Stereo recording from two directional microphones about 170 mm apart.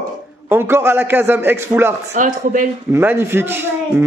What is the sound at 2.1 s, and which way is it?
Speech, 50° right (ahead or behind).